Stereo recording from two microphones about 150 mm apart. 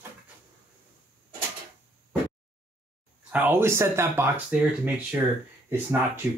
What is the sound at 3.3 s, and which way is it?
Speech, 15° right (ahead or behind).